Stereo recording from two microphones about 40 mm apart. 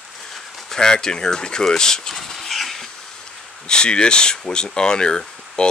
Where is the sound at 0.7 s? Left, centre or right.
Centre.